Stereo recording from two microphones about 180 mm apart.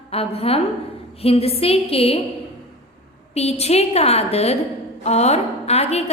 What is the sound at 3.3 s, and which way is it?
A woman's voice, 35° left (ahead or behind).